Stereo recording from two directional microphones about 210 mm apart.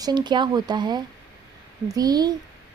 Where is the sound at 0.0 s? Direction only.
20° right (ahead or behind).